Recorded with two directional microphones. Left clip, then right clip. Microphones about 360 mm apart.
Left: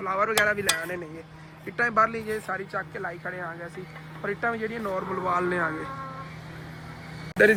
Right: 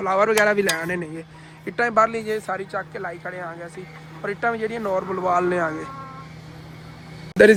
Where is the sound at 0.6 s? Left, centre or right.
Right.